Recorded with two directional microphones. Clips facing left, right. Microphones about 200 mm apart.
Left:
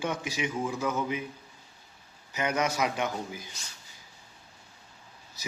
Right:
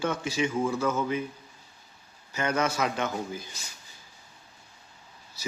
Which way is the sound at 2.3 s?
15° left (ahead or behind).